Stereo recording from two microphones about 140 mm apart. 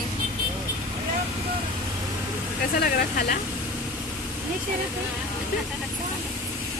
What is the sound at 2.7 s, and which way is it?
Speech, 90° left.